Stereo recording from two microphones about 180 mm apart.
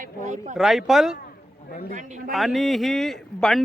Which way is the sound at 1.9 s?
45° right (ahead or behind).